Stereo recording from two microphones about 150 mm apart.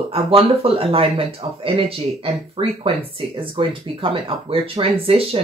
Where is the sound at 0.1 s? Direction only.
40° right (ahead or behind).